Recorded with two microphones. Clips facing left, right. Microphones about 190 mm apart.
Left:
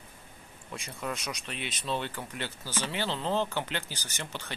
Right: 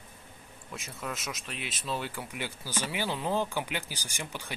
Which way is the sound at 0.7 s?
Centre (ahead or behind).